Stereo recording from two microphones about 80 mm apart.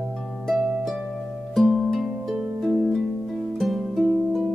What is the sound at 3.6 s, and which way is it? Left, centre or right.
Music, centre.